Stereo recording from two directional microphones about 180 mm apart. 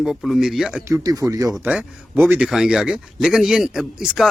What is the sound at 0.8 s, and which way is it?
Speech, 20° right (ahead or behind).